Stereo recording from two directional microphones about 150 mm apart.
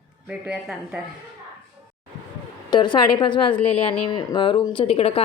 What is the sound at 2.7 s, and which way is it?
A woman's voice, 30° left (ahead or behind).